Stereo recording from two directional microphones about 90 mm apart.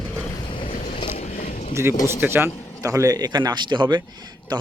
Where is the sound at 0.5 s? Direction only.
80° left.